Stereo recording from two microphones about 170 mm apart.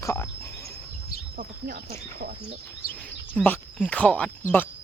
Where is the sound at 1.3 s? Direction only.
65° right (ahead or behind).